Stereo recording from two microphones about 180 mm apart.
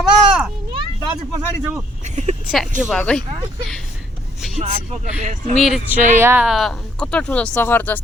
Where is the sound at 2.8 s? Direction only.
Centre (ahead or behind).